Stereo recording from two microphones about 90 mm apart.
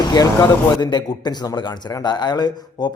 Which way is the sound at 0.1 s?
50° left (ahead or behind).